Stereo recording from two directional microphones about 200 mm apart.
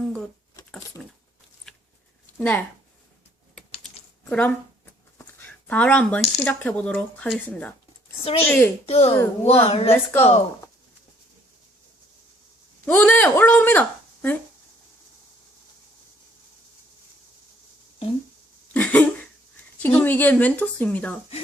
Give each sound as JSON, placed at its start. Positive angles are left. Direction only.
{"t": 1.0, "sound": "a sound", "side_deg": 0}
{"t": 2.4, "sound": "speech", "side_deg": 5}
{"t": 4.3, "sound": "speech", "side_deg": 5}
{"t": 5.1, "sound": "a sound", "side_deg": 10}
{"t": 6.4, "sound": "speech", "side_deg": 10}
{"t": 8.2, "sound": "speech", "side_deg": 30}
{"t": 8.4, "sound": "speech", "side_deg": 10}
{"t": 8.9, "sound": "a woman's voice", "side_deg": 30}
{"t": 9.9, "sound": "speech", "side_deg": 10}
{"t": 12.8, "sound": "speech", "side_deg": 10}
{"t": 18.7, "sound": "a sound", "side_deg": 10}
{"t": 19.8, "sound": "speech", "side_deg": 10}